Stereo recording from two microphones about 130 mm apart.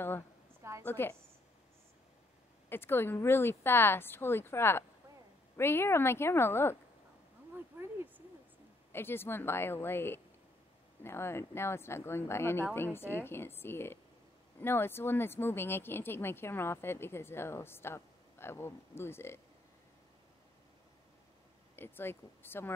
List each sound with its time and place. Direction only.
0.8 s speech: 15° left (ahead or behind)
2.7 s a woman's voice: 15° left (ahead or behind)
7.5 s a sound: 15° right (ahead or behind)
8.9 s a woman's voice: 15° left (ahead or behind)
21.7 s speech: 15° left (ahead or behind)